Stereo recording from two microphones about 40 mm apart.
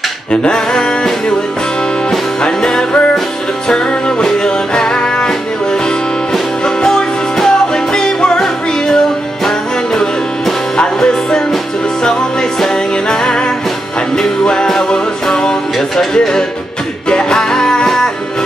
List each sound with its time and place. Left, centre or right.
0.3 s music: left
10.8 s music: left
17.1 s music: centre